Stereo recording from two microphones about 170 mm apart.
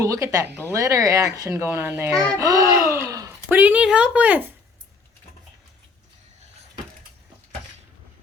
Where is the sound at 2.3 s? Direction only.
20° right (ahead or behind).